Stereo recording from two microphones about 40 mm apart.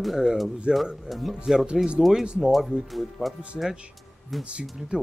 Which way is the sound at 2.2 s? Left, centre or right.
Right.